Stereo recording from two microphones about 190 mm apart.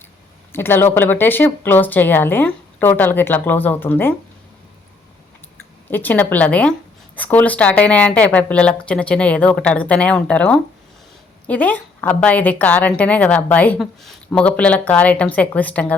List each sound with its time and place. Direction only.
0.5 s a woman's voice: 10° left (ahead or behind)
5.9 s a woman's voice: 10° left (ahead or behind)